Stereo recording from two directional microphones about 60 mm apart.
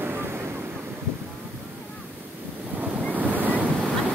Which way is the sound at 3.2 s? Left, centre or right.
Right.